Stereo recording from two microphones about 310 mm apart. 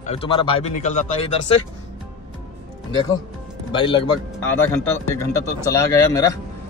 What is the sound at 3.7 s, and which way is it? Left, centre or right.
Speech, centre.